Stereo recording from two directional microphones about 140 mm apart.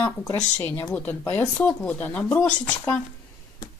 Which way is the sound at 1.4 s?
5° left (ahead or behind).